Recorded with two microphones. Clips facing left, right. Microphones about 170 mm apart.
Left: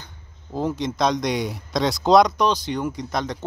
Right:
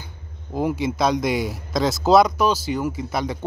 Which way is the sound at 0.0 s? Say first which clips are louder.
Right 4 dB; 10° right (ahead or behind).